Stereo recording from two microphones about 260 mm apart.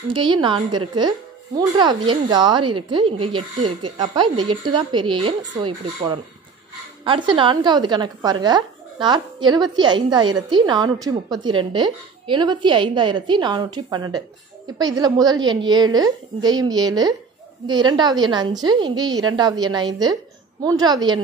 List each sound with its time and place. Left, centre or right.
0.1 s speech: centre
7.1 s speech: centre